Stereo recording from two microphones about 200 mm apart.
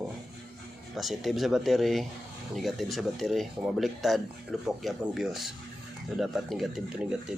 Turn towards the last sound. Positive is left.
turn(degrees=-5)  # may be behind; listen again after turning